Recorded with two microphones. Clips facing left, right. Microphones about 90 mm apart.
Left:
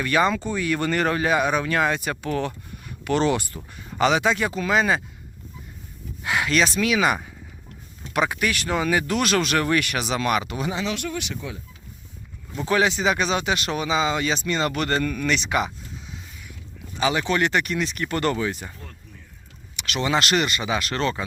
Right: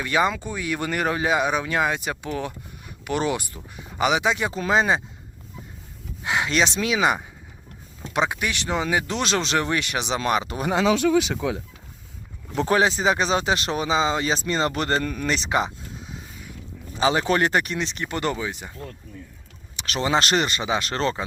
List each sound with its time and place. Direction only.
0.0 s speech: 15° right (ahead or behind)
4.5 s speech: 30° right (ahead or behind)
6.2 s speech: 20° right (ahead or behind)
11.3 s speech: 90° right
12.6 s speech: 35° right (ahead or behind)
17.0 s speech: 30° right (ahead or behind); by 18.7 s 15° right (ahead or behind)
19.7 s speech: 35° right (ahead or behind)